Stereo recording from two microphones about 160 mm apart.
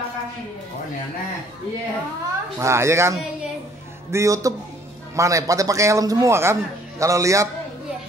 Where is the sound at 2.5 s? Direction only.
15° right (ahead or behind).